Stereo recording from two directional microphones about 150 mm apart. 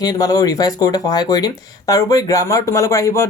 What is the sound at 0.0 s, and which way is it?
Speech, 25° left (ahead or behind).